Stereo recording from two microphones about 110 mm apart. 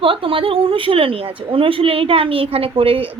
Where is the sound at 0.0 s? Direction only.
55° right (ahead or behind).